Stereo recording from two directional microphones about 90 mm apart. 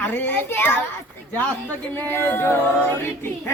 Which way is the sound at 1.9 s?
25° left (ahead or behind).